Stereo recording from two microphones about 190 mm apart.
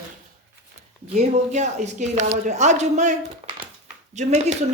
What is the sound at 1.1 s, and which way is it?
Speech, 40° right (ahead or behind).